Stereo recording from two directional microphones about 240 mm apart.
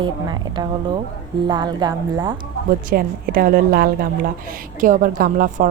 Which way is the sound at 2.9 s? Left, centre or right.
Right.